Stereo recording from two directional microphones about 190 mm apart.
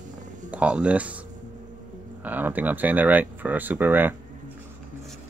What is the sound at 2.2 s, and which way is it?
Speech, 10° right (ahead or behind).